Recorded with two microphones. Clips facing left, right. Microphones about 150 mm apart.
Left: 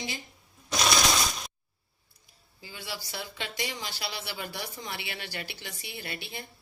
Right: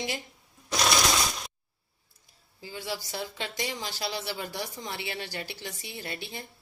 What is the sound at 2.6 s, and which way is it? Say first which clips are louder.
Speech: right 5 dB; 40° right (ahead or behind).